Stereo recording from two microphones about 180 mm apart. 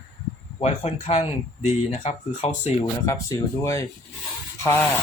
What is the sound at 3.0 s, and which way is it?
Speech, 15° left (ahead or behind).